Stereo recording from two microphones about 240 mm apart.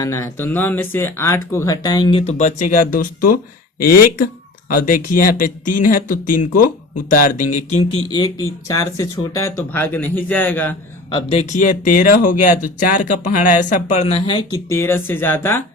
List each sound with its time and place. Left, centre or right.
0.0 s speech: centre; by 4.0 s left
5.1 s speech: left
6.2 s speech: left
7.1 s speech: left; by 10.8 s centre
11.1 s speech: left; by 15.6 s centre